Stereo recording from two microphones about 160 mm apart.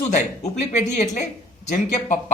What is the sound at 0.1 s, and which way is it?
Speech, 50° left (ahead or behind).